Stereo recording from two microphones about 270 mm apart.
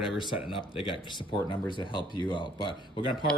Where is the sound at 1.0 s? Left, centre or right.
Centre.